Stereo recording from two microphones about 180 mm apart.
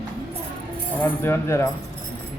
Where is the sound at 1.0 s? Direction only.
15° left (ahead or behind).